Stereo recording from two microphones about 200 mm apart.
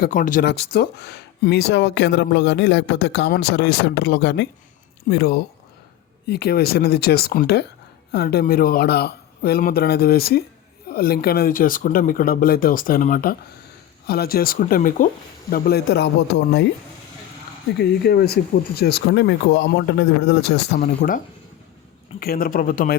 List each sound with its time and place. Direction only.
0.0 s speech: 40° left (ahead or behind)
0.4 s speech: 55° left (ahead or behind)
16.3 s speech: 65° left (ahead or behind)
17.7 s speech: 55° left (ahead or behind)
22.2 s speech: 50° left (ahead or behind)